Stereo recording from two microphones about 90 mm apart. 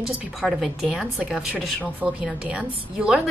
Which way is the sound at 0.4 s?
5° right (ahead or behind).